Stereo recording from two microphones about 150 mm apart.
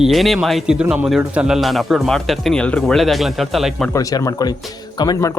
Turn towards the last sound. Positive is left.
turn(degrees=25)  # may be behind; listen again after turning